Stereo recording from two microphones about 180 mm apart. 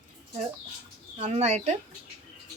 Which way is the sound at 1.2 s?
40° right (ahead or behind).